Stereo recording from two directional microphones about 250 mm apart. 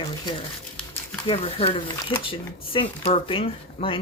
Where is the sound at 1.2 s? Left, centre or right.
Left.